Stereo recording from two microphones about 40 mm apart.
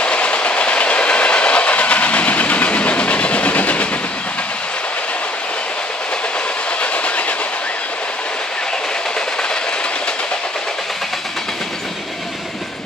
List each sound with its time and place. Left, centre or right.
0.0 s train: left
6.8 s train: left